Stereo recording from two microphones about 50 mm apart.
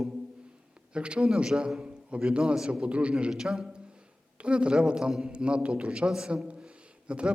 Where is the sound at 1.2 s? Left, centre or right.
Centre.